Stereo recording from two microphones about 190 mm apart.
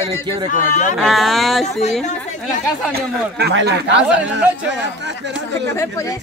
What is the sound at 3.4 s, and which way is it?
Speech, 65° right (ahead or behind).